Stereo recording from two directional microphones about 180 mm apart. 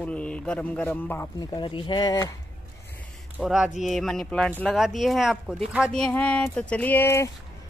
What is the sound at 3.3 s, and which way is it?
Speech, 5° right (ahead or behind).